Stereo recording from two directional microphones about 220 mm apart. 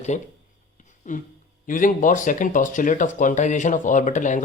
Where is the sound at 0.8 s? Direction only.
35° left (ahead or behind).